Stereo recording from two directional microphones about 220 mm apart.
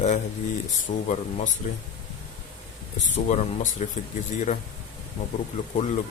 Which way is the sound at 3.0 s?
35° left (ahead or behind).